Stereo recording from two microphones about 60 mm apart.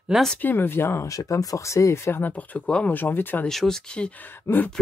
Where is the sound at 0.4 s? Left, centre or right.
Left.